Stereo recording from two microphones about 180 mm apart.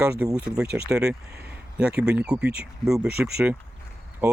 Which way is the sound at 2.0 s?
5° right (ahead or behind).